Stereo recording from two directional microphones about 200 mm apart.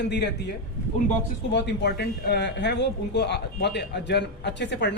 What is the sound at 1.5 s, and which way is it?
Speech, 60° left (ahead or behind).